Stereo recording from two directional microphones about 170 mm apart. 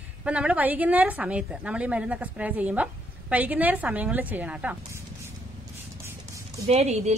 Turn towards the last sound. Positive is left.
turn(degrees=-40)  # may be behind; listen again after turning